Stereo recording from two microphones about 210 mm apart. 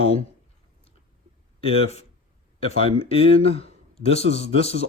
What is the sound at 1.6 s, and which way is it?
Speech, 30° left (ahead or behind).